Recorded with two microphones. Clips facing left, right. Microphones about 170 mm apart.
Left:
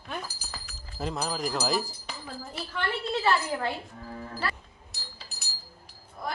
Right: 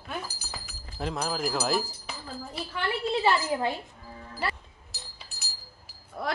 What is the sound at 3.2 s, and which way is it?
Speech, 15° right (ahead or behind).